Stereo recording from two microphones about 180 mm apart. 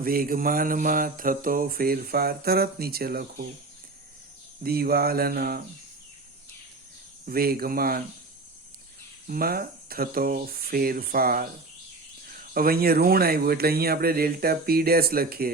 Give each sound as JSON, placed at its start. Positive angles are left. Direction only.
{"t": 0.0, "sound": "mantra", "side_deg": -55}
{"t": 4.6, "sound": "speech", "side_deg": -60}
{"t": 7.3, "sound": "speech", "side_deg": -55}
{"t": 9.2, "sound": "speech", "side_deg": -55}